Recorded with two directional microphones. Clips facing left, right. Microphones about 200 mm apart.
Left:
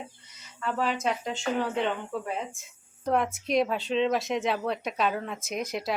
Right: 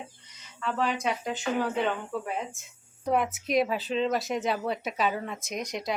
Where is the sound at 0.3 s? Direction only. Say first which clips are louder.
Even; 10° left (ahead or behind).